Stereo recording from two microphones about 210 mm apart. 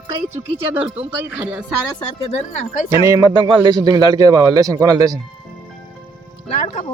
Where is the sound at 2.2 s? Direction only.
30° left (ahead or behind).